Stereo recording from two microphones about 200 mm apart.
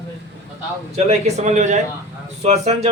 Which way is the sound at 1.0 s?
35° right (ahead or behind).